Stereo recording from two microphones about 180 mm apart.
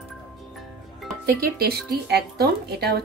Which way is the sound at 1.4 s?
60° right (ahead or behind).